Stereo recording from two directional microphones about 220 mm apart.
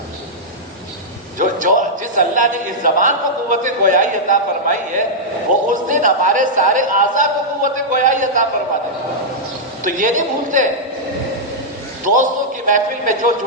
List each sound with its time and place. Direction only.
1.4 s a man's voice: 35° right (ahead or behind)
9.8 s a man's voice: 35° right (ahead or behind)
12.0 s a man's voice: 35° right (ahead or behind)